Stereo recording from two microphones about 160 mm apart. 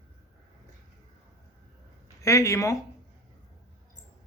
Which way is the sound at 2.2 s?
20° left (ahead or behind).